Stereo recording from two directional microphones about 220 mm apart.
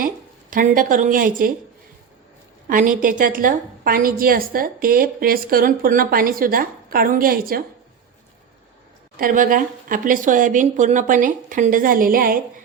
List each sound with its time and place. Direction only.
0.5 s a woman's voice: 40° right (ahead or behind)
2.6 s a woman's voice: 35° right (ahead or behind)
9.1 s a woman's voice: 40° right (ahead or behind)